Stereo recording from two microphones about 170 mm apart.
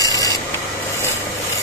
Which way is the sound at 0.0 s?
20° left (ahead or behind).